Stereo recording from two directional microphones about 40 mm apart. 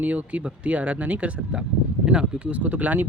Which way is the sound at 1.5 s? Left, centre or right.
Right.